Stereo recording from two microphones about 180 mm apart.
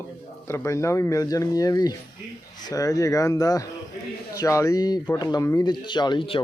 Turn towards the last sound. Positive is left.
turn(degrees=25)  # may be behind; listen again after turning